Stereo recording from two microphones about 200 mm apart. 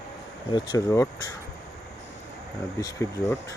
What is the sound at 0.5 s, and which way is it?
Speech, 20° left (ahead or behind).